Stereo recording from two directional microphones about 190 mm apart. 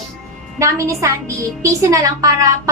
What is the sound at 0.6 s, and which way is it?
A woman's voice, 15° right (ahead or behind).